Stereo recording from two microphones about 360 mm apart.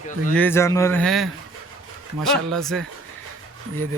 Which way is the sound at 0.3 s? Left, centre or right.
Centre.